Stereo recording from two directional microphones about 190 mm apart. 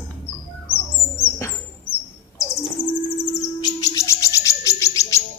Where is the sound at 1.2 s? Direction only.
15° left (ahead or behind).